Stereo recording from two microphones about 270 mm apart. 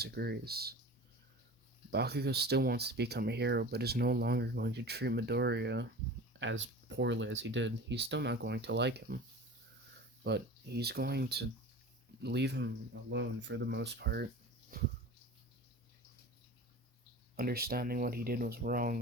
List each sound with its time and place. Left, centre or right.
0.0 s speech: right
1.9 s speech: right
10.2 s speech: right
17.3 s speech: right